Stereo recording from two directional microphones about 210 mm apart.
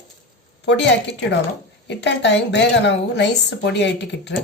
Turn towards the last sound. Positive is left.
turn(degrees=55)  # may be behind; listen again after turning